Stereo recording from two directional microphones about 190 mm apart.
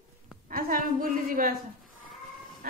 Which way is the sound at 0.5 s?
50° right (ahead or behind).